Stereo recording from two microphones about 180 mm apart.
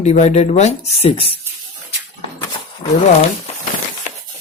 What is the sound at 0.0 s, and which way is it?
A man's voice, 40° left (ahead or behind).